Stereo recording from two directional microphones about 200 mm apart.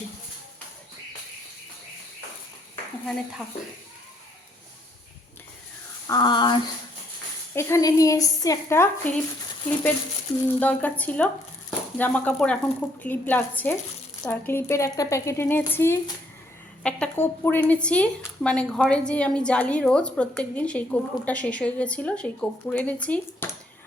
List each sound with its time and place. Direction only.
6.1 s a woman's voice: 20° left (ahead or behind)
10.6 s a woman's voice: 10° left (ahead or behind)